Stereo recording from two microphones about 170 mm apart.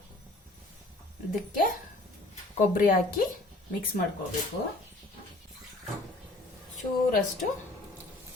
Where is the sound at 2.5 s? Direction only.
55° left (ahead or behind).